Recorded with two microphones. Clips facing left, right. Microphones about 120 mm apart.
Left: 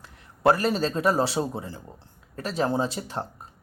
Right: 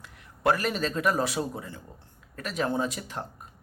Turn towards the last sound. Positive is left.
turn(degrees=30)  # may be behind; listen again after turning